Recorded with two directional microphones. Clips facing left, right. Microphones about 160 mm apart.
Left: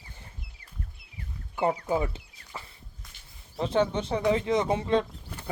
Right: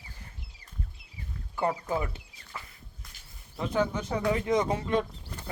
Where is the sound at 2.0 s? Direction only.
25° left (ahead or behind).